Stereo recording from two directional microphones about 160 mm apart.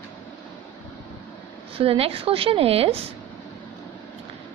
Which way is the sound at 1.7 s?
35° right (ahead or behind).